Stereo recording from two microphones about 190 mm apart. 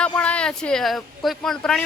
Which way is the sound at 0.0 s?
5° left (ahead or behind).